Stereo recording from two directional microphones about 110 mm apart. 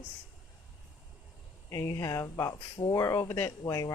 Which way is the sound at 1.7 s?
25° left (ahead or behind).